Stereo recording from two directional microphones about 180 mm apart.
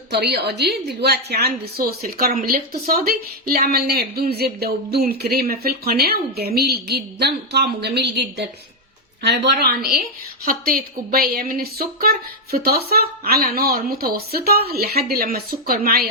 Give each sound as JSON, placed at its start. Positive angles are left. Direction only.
{"t": 0.1, "sound": "a woman's voice", "side_deg": -65}